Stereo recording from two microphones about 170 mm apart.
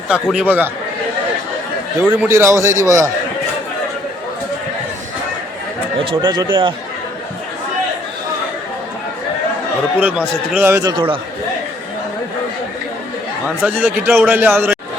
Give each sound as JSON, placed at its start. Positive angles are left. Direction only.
{"t": 0.1, "sound": "a man's voice", "side_deg": -5}
{"t": 2.0, "sound": "a man's voice", "side_deg": -10}
{"t": 6.1, "sound": "speech", "side_deg": -25}
{"t": 10.0, "sound": "a man's voice", "side_deg": -5}
{"t": 10.9, "sound": "a man's voice", "side_deg": -30}
{"t": 13.6, "sound": "a man's voice", "side_deg": -10}